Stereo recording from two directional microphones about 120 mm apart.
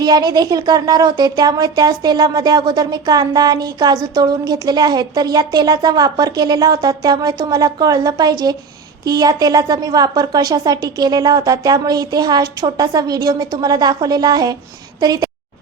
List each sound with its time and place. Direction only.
0.0 s speech: 35° right (ahead or behind)